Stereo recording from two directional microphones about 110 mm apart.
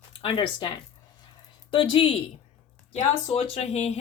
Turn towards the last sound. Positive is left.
turn(degrees=85)